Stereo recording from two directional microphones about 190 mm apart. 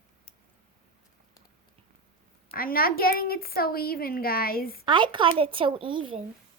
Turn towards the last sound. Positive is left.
turn(degrees=-25)  # may be behind; listen again after turning